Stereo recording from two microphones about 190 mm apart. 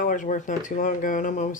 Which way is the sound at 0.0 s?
45° left (ahead or behind).